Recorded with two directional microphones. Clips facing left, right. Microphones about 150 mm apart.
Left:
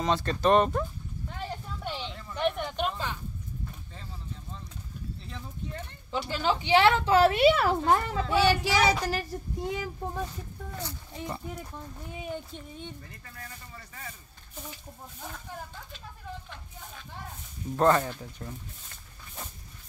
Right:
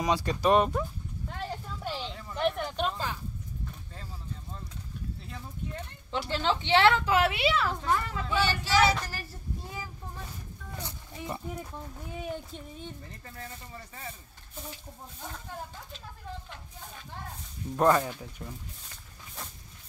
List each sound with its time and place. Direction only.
0.0 s speech: 10° right (ahead or behind)
1.4 s a sound: centre (ahead or behind)
6.1 s a woman's voice: 5° left (ahead or behind)
7.1 s a woman's voice: 40° left (ahead or behind)
7.7 s a woman's voice: 35° left (ahead or behind)
8.6 s a woman's voice: 15° left (ahead or behind)
9.6 s a child's voice: 75° left (ahead or behind)
10.8 s speech: 20° right (ahead or behind)
12.2 s speech: centre (ahead or behind)
13.2 s speech: 30° right (ahead or behind)
17.7 s speech: 10° right (ahead or behind)